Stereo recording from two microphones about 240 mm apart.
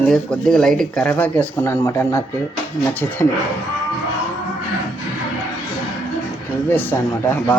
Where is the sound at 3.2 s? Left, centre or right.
Centre.